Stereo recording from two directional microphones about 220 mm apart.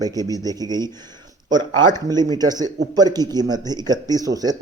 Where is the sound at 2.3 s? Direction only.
15° right (ahead or behind).